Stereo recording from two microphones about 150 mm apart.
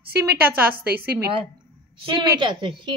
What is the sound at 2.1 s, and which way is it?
Speech, 30° right (ahead or behind).